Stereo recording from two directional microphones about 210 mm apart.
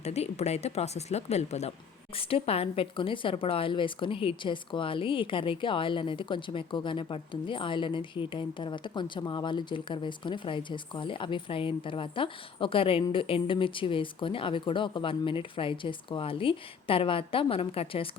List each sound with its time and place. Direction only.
0.0 s a woman's voice: 30° left (ahead or behind)